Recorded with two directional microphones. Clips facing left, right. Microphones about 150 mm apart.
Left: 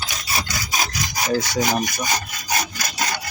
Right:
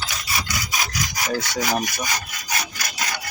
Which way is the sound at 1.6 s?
20° left (ahead or behind).